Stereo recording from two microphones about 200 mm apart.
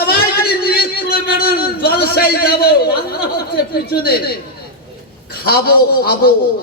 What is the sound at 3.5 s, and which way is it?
Speech, 50° left (ahead or behind).